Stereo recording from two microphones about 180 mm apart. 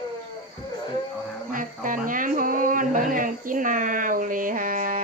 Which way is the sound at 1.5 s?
50° right (ahead or behind).